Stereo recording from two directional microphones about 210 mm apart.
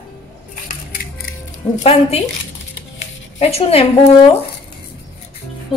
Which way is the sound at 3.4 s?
30° left (ahead or behind).